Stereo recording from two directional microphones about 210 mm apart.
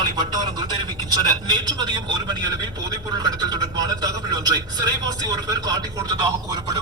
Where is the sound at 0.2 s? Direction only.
20° right (ahead or behind).